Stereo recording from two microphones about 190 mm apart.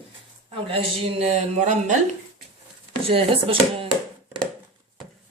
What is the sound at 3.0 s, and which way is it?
Speech, 30° right (ahead or behind).